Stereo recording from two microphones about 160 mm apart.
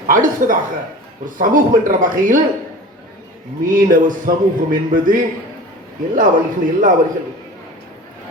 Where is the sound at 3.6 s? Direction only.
55° right (ahead or behind).